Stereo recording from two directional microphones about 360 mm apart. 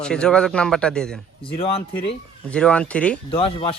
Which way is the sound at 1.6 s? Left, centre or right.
Centre.